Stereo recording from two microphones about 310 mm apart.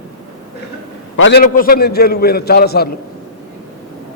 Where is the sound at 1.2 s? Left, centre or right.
Left.